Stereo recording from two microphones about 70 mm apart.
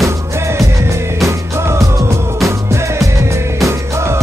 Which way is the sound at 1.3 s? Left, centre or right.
Right.